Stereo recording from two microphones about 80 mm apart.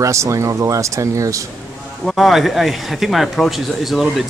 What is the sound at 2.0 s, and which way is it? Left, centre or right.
Speech, centre.